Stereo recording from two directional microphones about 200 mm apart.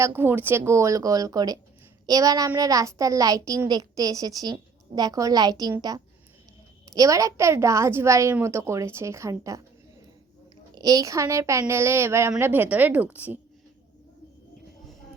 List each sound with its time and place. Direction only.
0.0 s a child's voice: 10° right (ahead or behind)
10.8 s a child's voice: 20° right (ahead or behind)